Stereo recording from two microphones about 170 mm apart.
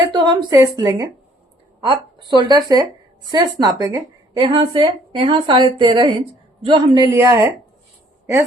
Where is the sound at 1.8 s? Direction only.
30° right (ahead or behind).